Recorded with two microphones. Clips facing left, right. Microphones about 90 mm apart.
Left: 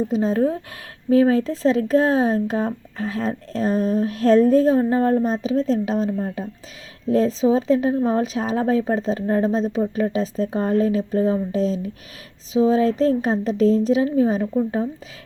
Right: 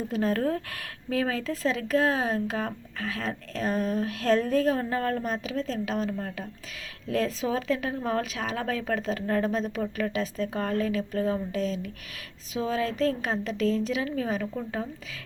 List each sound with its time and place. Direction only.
0.1 s speech: 20° left (ahead or behind)
1.1 s speech: 30° left (ahead or behind)